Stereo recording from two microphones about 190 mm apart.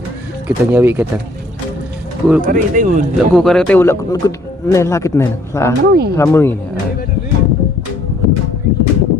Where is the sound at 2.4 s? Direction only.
45° right (ahead or behind).